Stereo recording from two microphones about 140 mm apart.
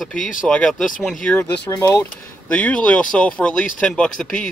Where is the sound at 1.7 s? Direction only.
20° left (ahead or behind).